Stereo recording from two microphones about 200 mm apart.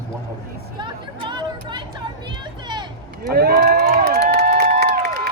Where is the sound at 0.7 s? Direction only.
25° right (ahead or behind).